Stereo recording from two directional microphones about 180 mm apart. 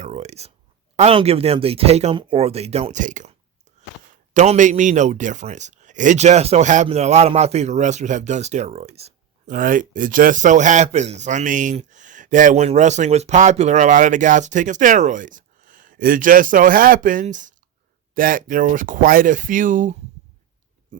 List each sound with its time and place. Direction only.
0.0 s a sound: 40° right (ahead or behind)
0.9 s a man's voice: 35° right (ahead or behind)
4.4 s a man's voice: 40° right (ahead or behind)
9.6 s speech: 50° right (ahead or behind)